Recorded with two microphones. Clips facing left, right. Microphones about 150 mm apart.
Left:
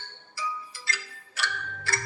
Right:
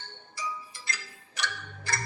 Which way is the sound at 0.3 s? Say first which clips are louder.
Left 2 dB; 20° right (ahead or behind).